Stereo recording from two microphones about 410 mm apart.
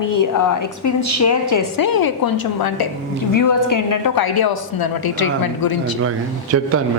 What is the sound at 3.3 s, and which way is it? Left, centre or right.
A woman's voice, left.